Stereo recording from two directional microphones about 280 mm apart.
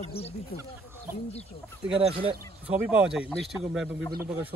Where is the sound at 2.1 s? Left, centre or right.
Centre.